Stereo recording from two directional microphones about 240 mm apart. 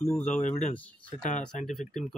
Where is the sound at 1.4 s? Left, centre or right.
Centre.